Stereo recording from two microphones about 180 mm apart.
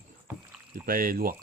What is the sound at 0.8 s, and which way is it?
Speech, 55° right (ahead or behind).